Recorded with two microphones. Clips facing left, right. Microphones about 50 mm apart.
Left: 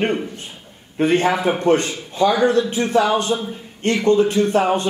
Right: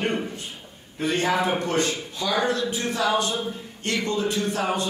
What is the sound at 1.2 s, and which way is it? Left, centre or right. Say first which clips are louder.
Speech: left 5 dB; left.